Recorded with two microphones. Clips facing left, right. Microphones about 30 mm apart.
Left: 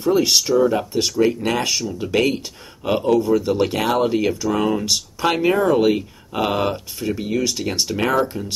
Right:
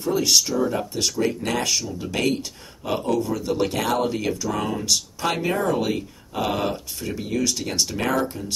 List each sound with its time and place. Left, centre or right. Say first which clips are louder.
0.0 s speech: left 4 dB; centre